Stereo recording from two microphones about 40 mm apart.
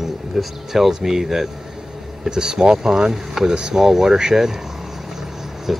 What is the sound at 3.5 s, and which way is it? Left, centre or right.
Speech, right.